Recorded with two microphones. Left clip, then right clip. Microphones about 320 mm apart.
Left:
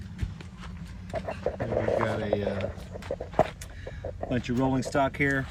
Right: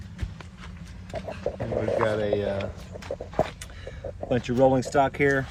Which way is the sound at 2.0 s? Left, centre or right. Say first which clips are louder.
Right 4 dB; centre.